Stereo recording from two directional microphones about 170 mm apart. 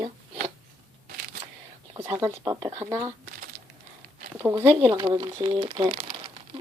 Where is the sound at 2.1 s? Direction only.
20° right (ahead or behind).